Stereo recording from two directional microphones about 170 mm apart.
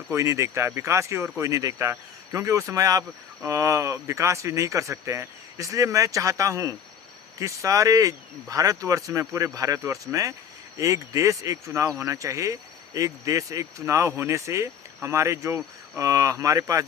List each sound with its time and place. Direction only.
0.1 s speech: 15° right (ahead or behind)